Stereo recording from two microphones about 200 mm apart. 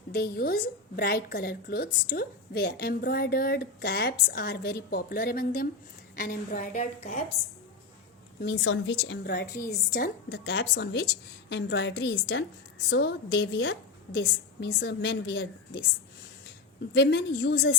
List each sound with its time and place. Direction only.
0.1 s a woman's voice: 50° left (ahead or behind); by 7.2 s 35° left (ahead or behind)
8.4 s a woman's voice: 60° left (ahead or behind)
16.9 s a woman's voice: 55° left (ahead or behind)